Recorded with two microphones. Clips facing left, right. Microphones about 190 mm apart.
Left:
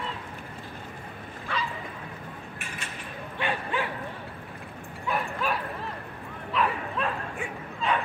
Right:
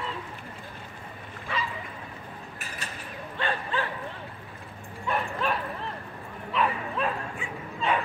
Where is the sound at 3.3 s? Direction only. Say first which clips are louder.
Even; 15° left (ahead or behind).